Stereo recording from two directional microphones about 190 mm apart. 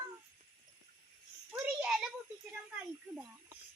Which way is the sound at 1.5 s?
5° right (ahead or behind).